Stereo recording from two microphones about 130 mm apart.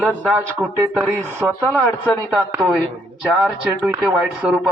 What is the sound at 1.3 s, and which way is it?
Speech, 15° right (ahead or behind).